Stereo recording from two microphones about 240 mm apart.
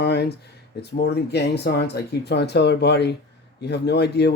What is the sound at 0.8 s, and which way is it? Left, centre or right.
Speech, left.